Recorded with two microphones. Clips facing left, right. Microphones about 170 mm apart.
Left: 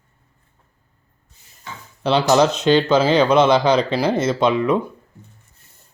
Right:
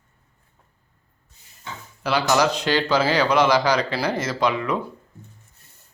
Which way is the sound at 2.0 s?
25° left (ahead or behind).